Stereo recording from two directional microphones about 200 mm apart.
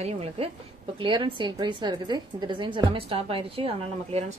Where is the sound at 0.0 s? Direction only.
30° right (ahead or behind).